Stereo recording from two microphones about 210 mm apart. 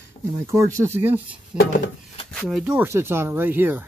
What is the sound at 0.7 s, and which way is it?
Speech, 10° right (ahead or behind).